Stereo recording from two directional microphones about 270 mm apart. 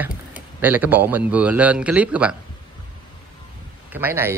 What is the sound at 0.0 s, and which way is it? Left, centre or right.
Speech, centre.